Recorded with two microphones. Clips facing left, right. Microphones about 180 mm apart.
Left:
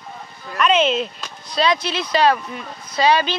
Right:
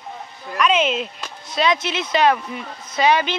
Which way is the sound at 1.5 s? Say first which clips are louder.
Left 1 dB; 20° right (ahead or behind).